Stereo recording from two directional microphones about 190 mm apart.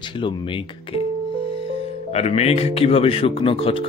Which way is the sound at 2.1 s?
35° left (ahead or behind).